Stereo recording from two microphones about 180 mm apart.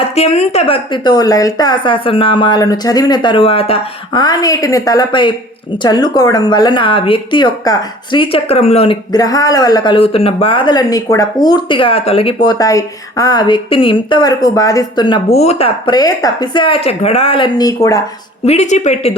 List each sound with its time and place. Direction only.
0.2 s speech: 35° left (ahead or behind); by 18.0 s 20° left (ahead or behind)
18.4 s a woman's voice: 40° left (ahead or behind)